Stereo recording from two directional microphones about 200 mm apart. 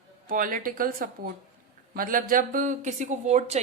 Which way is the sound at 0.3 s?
45° right (ahead or behind).